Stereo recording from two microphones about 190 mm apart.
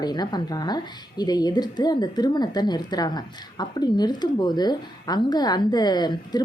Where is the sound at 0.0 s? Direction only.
20° left (ahead or behind).